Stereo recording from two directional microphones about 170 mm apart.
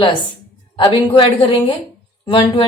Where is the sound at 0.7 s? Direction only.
30° left (ahead or behind).